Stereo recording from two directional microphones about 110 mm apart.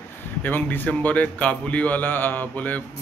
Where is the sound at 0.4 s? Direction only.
15° left (ahead or behind).